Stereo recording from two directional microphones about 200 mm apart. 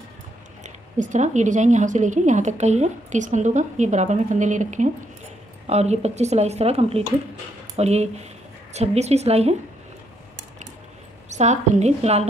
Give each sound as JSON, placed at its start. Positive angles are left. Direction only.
{"t": 0.7, "sound": "speech", "side_deg": -40}
{"t": 11.2, "sound": "speech", "side_deg": -35}